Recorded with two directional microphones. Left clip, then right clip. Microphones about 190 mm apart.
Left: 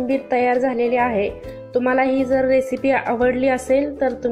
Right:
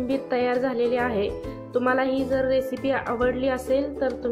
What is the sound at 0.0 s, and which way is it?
Speech, 15° left (ahead or behind).